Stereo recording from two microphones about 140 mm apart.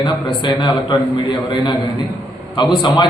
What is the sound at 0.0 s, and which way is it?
A man's voice, 35° left (ahead or behind).